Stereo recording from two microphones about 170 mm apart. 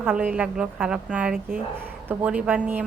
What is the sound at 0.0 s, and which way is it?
A woman's voice, 10° right (ahead or behind).